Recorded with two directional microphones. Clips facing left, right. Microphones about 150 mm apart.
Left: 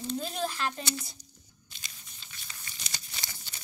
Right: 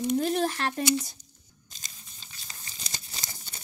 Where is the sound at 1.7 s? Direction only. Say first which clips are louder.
Right 1 dB; 35° right (ahead or behind).